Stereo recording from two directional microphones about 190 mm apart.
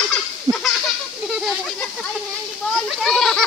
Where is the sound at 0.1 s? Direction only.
5° left (ahead or behind).